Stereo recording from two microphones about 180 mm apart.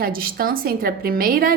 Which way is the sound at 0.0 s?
55° right (ahead or behind).